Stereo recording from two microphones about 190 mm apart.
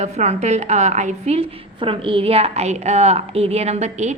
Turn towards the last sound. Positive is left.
turn(degrees=-35)  # may be behind; listen again after turning